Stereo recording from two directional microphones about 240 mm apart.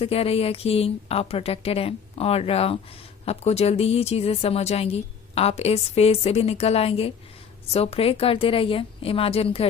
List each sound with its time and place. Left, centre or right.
0.0 s speech: left